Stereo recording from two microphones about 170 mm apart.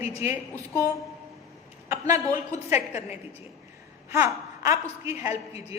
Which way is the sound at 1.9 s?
20° right (ahead or behind).